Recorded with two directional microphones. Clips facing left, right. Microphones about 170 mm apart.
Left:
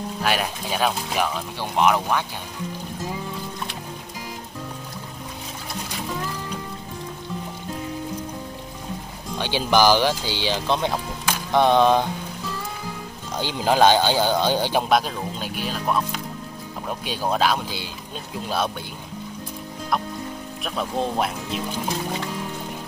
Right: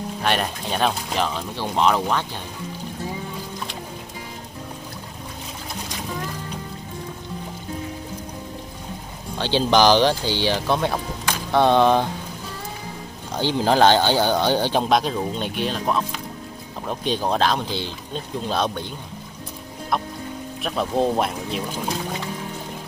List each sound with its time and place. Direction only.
0.2 s speech: 5° left (ahead or behind)
9.4 s speech: 10° left (ahead or behind)
11.2 s music: 15° left (ahead or behind)
11.7 s a sound: 15° right (ahead or behind)
13.4 s speech: 15° left (ahead or behind)
20.6 s speech: centre (ahead or behind)